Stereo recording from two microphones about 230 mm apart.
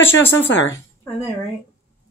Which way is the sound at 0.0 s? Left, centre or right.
Centre.